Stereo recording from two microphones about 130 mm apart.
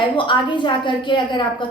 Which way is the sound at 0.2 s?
40° left (ahead or behind).